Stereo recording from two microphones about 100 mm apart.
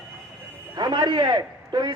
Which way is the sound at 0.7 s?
50° right (ahead or behind).